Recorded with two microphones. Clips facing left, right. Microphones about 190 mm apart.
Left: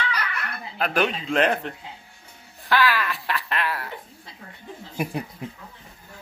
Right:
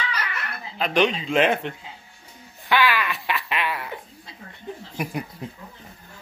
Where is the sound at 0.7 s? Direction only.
5° left (ahead or behind).